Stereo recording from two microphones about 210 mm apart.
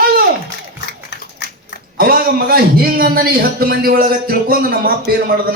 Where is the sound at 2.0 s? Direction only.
45° right (ahead or behind).